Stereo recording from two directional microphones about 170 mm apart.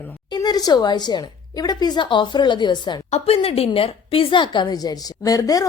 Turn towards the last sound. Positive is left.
turn(degrees=20)  # may be behind; listen again after turning